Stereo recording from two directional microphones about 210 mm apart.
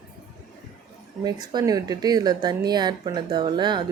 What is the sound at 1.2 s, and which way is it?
A woman's voice, 20° right (ahead or behind).